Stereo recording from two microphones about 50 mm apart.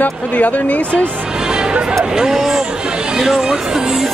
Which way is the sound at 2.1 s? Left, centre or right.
Centre.